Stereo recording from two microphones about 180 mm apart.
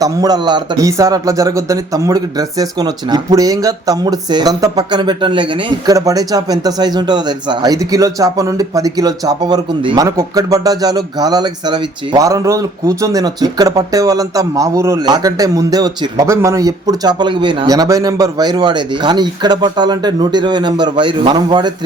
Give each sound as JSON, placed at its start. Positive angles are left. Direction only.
{"t": 0.0, "sound": "a man's voice", "side_deg": -20}